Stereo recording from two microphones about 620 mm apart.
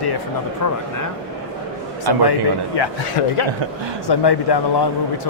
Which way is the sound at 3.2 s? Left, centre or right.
Left.